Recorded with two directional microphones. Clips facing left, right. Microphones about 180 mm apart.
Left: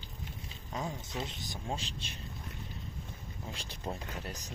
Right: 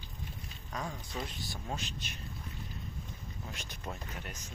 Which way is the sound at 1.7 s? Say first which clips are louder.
Left 1 dB; 30° left (ahead or behind).